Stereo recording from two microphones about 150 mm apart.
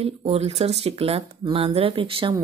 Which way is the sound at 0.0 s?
45° right (ahead or behind).